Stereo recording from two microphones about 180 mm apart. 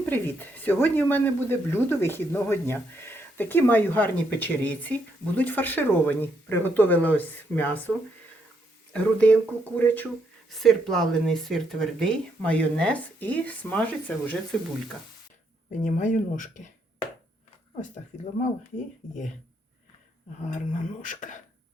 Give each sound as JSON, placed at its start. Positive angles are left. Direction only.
{"t": 0.0, "sound": "speech", "side_deg": 10}
{"t": 15.8, "sound": "speech", "side_deg": 45}
{"t": 17.7, "sound": "speech", "side_deg": 40}
{"t": 21.0, "sound": "speech", "side_deg": 45}